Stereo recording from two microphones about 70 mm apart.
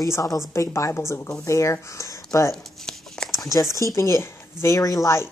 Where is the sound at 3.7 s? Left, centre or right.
Left.